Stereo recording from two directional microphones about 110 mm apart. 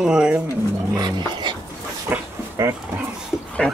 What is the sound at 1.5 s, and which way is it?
Dog, 45° right (ahead or behind).